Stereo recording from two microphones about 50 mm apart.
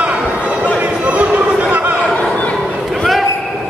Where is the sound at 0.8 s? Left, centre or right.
Right.